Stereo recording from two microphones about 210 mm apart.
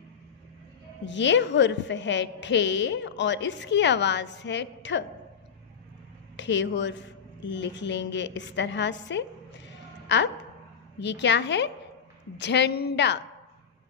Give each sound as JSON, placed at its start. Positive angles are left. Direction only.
{"t": 1.0, "sound": "a woman's voice", "side_deg": 60}
{"t": 6.3, "sound": "a woman's voice", "side_deg": 60}